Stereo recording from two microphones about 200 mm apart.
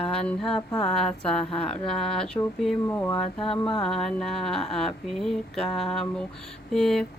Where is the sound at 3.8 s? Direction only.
5° left (ahead or behind).